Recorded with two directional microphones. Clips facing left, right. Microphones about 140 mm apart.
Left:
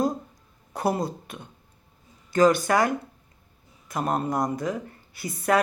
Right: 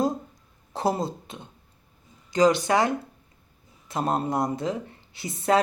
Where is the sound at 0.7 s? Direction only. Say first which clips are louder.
Even; 25° right (ahead or behind).